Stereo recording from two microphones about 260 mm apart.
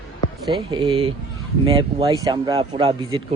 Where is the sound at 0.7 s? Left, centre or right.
Centre.